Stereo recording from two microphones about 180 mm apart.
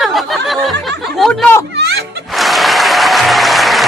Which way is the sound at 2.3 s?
Centre (ahead or behind).